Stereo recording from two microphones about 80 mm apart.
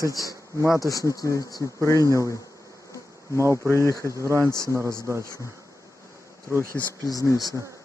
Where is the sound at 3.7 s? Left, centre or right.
Left.